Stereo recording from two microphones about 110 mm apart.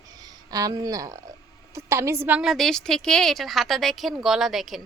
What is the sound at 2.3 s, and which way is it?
Speech, 10° right (ahead or behind).